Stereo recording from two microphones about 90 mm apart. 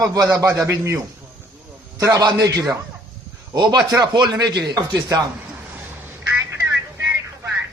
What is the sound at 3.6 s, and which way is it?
Speech, 55° right (ahead or behind).